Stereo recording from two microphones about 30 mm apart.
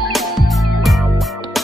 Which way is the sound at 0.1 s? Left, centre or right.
Centre.